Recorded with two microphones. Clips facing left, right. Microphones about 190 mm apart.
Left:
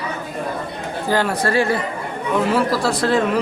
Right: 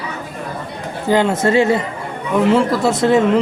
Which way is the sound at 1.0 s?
20° right (ahead or behind).